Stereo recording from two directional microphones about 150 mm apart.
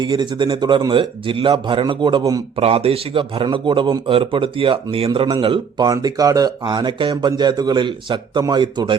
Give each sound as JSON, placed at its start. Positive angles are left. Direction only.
{"t": 0.0, "sound": "a man's voice", "side_deg": -30}
{"t": 2.6, "sound": "a man's voice", "side_deg": -40}